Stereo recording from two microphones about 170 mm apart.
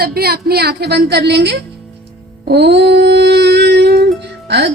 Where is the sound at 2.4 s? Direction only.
80° right.